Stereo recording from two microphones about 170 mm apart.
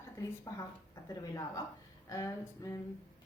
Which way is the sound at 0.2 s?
20° left (ahead or behind).